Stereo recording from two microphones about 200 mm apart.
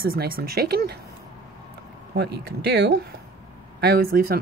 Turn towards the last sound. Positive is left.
turn(degrees=-50)  # may be behind; listen again after turning